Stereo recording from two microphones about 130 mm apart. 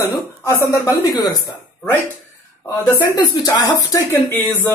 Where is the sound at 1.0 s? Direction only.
35° left (ahead or behind).